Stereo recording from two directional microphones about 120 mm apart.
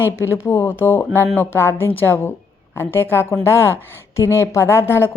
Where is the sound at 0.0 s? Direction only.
20° left (ahead or behind).